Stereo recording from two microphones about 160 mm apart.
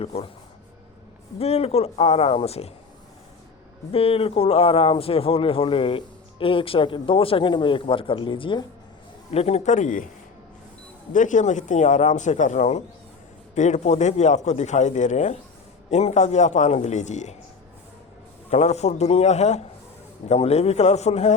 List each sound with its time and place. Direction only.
0.0 s speech: 40° left (ahead or behind)
1.4 s speech: 40° left (ahead or behind)
3.9 s speech: 35° left (ahead or behind); by 10.1 s 50° left (ahead or behind)
11.1 s speech: 55° left (ahead or behind)
18.5 s speech: 45° left (ahead or behind)